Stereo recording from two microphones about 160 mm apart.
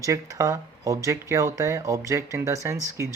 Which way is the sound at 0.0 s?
20° right (ahead or behind).